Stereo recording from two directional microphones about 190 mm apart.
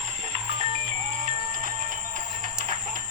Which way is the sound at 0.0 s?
40° right (ahead or behind).